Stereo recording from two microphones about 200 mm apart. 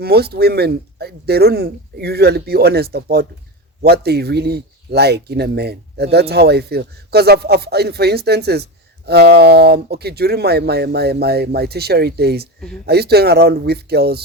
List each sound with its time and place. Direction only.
0.0 s speech: 50° right (ahead or behind)